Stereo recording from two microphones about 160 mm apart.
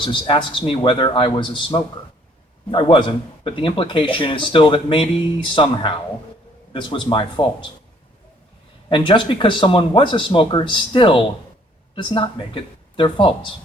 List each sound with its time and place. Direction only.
0.0 s a man's voice: 30° left (ahead or behind)
8.9 s a man's voice: 30° left (ahead or behind)